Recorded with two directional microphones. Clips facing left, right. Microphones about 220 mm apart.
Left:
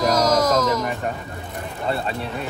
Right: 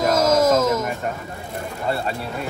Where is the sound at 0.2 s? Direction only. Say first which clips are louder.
Right 2 dB; 25° right (ahead or behind).